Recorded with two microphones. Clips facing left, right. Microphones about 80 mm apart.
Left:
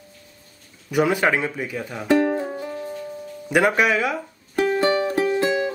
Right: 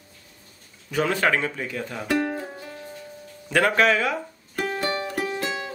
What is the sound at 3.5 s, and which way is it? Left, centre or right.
Speech, centre.